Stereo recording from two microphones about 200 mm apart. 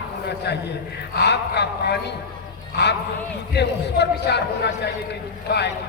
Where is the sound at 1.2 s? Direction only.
55° left (ahead or behind).